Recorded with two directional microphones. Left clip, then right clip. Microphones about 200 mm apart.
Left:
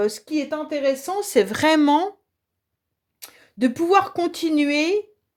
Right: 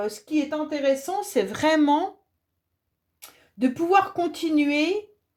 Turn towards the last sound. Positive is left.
turn(degrees=45)  # may be behind; listen again after turning